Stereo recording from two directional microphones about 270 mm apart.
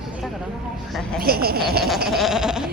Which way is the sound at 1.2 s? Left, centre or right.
Right.